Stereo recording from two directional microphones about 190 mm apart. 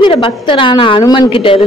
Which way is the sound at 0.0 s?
25° left (ahead or behind).